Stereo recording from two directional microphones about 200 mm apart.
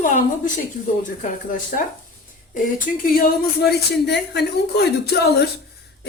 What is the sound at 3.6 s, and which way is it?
A woman's voice, 55° left (ahead or behind).